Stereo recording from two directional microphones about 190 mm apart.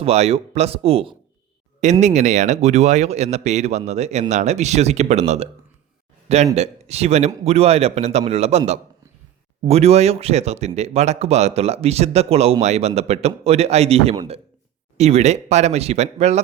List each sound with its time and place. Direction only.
0.0 s speech: 35° right (ahead or behind)